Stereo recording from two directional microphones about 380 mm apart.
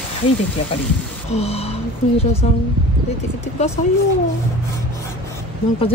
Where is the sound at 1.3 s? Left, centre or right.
Centre.